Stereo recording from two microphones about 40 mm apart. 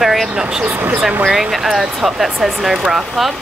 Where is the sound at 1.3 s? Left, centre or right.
Centre.